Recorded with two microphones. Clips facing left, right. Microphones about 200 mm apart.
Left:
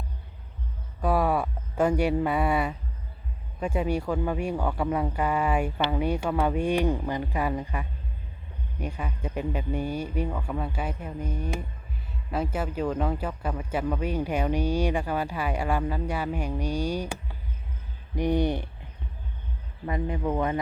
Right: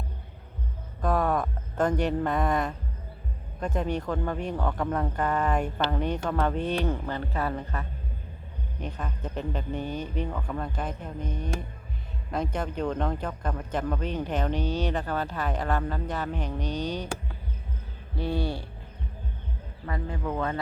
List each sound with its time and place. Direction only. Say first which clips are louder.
1.0 s a sound: left 1 dB; 10° left (ahead or behind)
3.6 s speech: left 2 dB; 10° left (ahead or behind)
19.8 s speech: left 4 dB; 20° left (ahead or behind)